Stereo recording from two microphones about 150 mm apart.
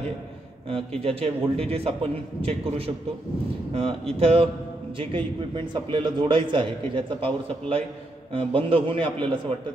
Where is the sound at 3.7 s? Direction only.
40° right (ahead or behind).